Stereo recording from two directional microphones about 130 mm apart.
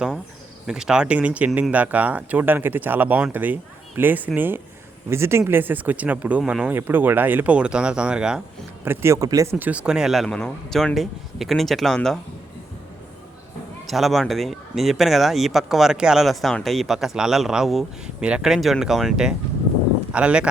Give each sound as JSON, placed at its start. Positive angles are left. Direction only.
{"t": 0.7, "sound": "speech", "side_deg": -5}
{"t": 8.8, "sound": "speech", "side_deg": -20}
{"t": 9.6, "sound": "speech", "side_deg": -10}
{"t": 13.8, "sound": "speech", "side_deg": 0}